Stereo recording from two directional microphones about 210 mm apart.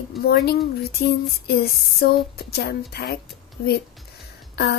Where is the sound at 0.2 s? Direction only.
50° left (ahead or behind).